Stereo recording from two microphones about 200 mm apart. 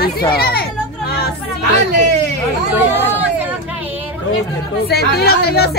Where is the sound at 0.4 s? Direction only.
50° left (ahead or behind).